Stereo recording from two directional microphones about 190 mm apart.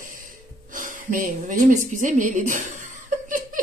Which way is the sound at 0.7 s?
45° right (ahead or behind).